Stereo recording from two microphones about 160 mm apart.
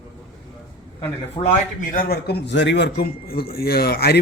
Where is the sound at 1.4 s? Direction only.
25° left (ahead or behind).